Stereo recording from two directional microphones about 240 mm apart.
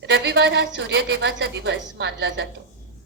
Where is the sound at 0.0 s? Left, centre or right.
Right.